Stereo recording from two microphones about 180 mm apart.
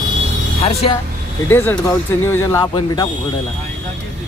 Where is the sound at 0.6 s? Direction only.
35° left (ahead or behind).